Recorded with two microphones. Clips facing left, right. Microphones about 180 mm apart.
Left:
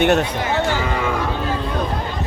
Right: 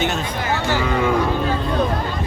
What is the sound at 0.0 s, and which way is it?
Speech, 65° left (ahead or behind).